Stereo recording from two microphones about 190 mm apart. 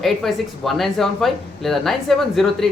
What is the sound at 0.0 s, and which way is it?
Speech, centre (ahead or behind).